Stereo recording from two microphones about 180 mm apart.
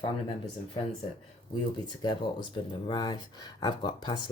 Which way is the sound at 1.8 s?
25° left (ahead or behind).